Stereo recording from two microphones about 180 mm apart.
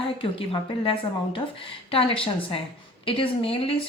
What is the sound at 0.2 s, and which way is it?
A woman's voice, 30° left (ahead or behind).